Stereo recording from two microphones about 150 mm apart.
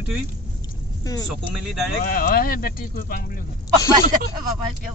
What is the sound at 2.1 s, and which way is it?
Speech, 75° left (ahead or behind).